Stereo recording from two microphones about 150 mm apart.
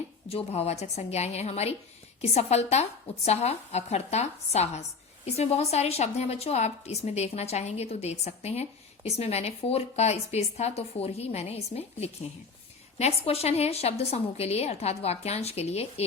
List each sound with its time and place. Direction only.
0.3 s a woman's voice: 40° left (ahead or behind)